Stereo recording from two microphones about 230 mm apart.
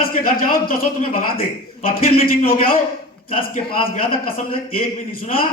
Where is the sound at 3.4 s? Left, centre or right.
Left.